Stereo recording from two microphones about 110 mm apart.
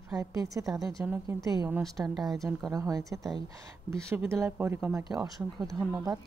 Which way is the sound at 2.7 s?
30° right (ahead or behind).